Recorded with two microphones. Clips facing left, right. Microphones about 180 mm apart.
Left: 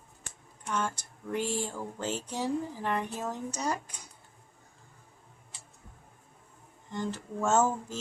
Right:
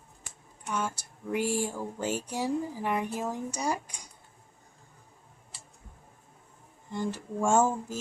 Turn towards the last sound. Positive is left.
turn(degrees=-10)  # may be behind; listen again after turning